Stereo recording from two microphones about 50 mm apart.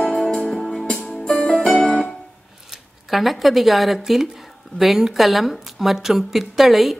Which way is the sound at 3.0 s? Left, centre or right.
Centre.